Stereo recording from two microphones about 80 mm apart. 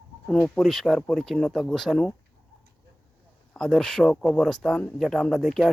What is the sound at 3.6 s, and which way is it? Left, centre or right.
Speech, centre.